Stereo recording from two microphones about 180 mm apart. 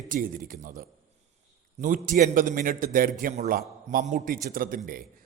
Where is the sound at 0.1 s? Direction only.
50° right (ahead or behind).